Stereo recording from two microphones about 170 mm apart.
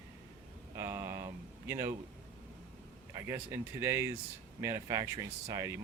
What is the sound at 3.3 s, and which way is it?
Speech, 15° right (ahead or behind).